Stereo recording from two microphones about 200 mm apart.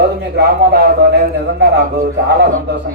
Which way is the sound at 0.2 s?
55° right (ahead or behind).